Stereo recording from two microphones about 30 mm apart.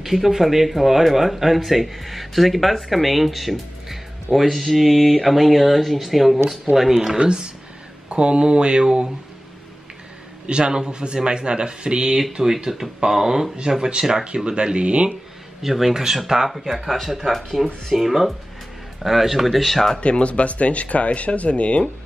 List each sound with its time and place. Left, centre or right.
0.0 s speech: centre
7.2 s speech: right
10.4 s speech: right
14.2 s speech: right
15.6 s speech: centre
20.0 s speech: left